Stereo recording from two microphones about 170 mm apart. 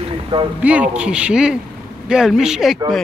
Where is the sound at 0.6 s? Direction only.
5° right (ahead or behind).